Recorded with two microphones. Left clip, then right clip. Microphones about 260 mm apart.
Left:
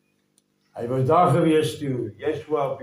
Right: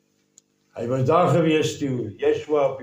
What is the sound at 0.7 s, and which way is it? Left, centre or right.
A man's voice, right.